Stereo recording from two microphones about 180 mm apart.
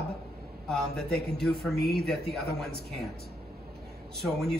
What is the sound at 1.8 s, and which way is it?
Speech, 65° left (ahead or behind).